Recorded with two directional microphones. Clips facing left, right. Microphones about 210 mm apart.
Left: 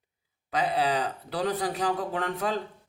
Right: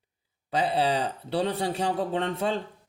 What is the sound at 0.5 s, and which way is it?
A man's voice, 30° right (ahead or behind).